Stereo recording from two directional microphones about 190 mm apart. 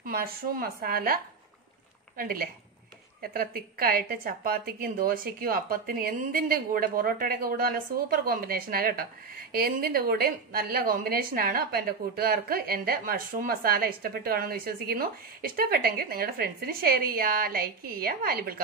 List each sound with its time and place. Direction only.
0.0 s a woman's voice: 50° right (ahead or behind)